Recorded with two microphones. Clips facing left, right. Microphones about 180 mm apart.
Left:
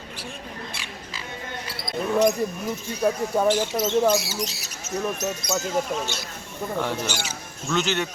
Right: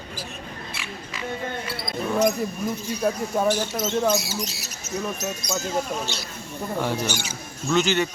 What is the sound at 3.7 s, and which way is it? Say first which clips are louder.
Speech: left 2 dB; centre (ahead or behind).